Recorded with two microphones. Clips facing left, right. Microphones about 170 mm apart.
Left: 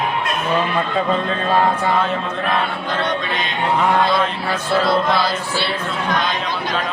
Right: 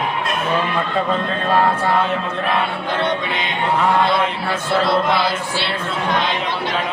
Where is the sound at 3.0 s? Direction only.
20° right (ahead or behind).